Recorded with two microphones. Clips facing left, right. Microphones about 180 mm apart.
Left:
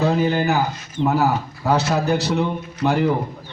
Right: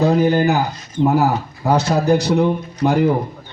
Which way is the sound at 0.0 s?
15° right (ahead or behind).